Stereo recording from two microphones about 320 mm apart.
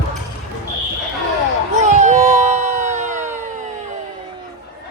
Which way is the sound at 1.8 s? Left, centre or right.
Right.